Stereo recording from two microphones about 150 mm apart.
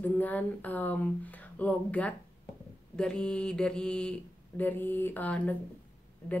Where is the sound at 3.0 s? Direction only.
5° left (ahead or behind).